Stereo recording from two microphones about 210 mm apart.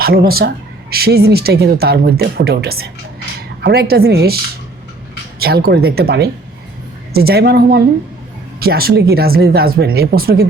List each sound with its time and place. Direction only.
0.0 s speech: 45° right (ahead or behind)
5.4 s speech: 50° right (ahead or behind)